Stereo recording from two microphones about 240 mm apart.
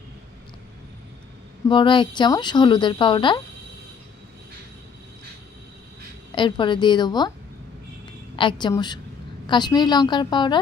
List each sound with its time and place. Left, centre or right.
1.6 s a woman's voice: centre
6.3 s a woman's voice: centre
8.4 s a woman's voice: centre